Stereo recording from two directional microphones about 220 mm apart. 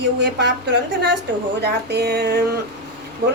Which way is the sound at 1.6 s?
50° right (ahead or behind).